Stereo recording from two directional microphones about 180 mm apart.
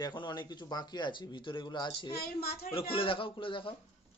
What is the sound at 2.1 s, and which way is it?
Speech, 60° left (ahead or behind).